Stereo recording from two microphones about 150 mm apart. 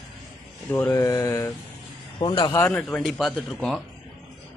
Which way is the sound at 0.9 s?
20° left (ahead or behind).